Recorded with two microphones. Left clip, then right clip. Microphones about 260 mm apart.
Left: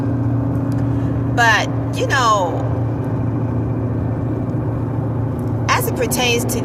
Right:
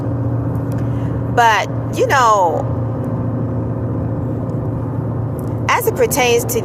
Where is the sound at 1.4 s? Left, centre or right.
Right.